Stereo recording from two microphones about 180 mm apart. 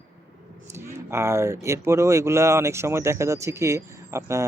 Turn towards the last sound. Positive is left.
turn(degrees=-15)  # may be behind; listen again after turning